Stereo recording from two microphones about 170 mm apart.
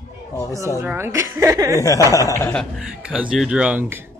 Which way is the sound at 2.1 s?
20° left (ahead or behind).